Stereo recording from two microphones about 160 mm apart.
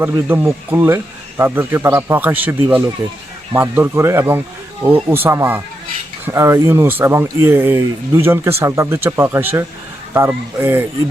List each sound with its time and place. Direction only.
0.0 s speech: 15° right (ahead or behind)